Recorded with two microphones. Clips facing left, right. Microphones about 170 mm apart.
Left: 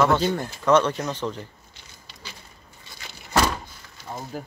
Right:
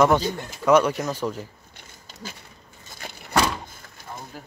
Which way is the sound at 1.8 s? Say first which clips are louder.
Right 8 dB; 45° right (ahead or behind).